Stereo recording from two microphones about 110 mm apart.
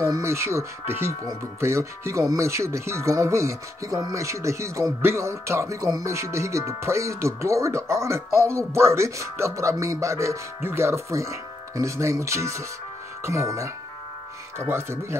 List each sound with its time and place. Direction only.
0.0 s speech: 25° right (ahead or behind)